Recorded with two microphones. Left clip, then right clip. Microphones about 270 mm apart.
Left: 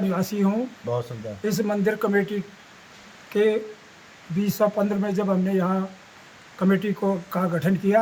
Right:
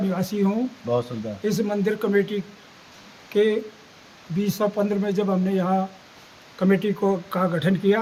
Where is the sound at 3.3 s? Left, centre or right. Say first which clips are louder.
Right 1 dB; centre.